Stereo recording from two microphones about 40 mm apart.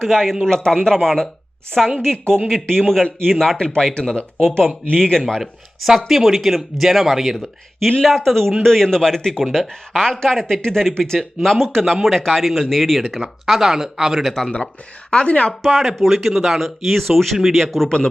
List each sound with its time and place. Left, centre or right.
0.0 s a woman's voice: centre
5.4 s speech: centre
13.4 s speech: centre
14.4 s speech: centre
15.1 s a woman's voice: left
15.6 s speech: centre
17.8 s a woman's voice: centre